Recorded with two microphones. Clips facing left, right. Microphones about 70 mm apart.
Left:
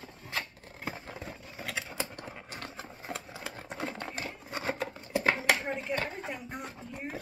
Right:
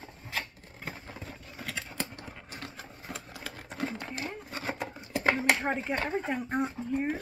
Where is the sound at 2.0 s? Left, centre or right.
Centre.